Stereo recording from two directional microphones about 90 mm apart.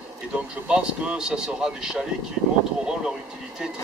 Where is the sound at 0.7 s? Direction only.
10° right (ahead or behind).